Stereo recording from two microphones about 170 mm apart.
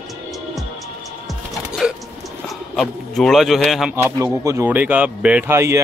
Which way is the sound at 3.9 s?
15° right (ahead or behind).